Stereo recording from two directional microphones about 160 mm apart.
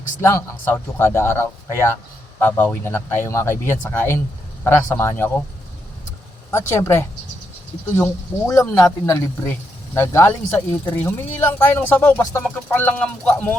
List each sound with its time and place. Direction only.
0.2 s speech: 15° left (ahead or behind)
6.5 s speech: 15° left (ahead or behind)